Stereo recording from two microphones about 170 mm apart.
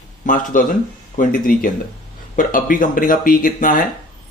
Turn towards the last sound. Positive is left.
turn(degrees=55)  # may be behind; listen again after turning